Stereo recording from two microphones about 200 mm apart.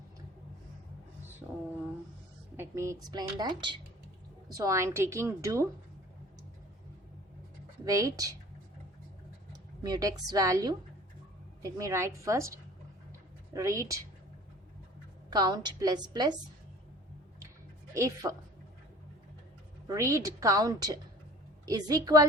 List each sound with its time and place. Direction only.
1.4 s a woman's voice: 5° right (ahead or behind)
2.6 s a woman's voice: 15° right (ahead or behind)
7.9 s a woman's voice: 15° right (ahead or behind)
9.5 s a woman's voice: 20° right (ahead or behind)
15.3 s speech: 20° right (ahead or behind)
17.9 s a woman's voice: 15° right (ahead or behind)
19.9 s a woman's voice: 15° right (ahead or behind)